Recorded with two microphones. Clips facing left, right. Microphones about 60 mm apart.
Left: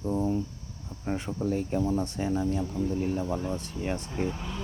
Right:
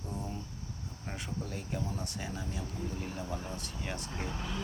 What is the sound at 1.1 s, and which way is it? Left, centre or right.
Speech, left.